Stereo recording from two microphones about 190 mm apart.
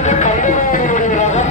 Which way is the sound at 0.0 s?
40° left (ahead or behind).